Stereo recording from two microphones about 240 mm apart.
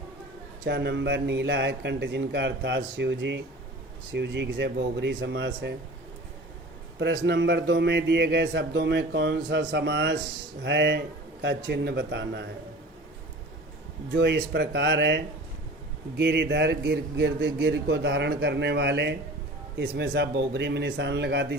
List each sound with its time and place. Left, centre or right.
0.6 s a man's voice: right
7.3 s a man's voice: right
14.1 s a man's voice: right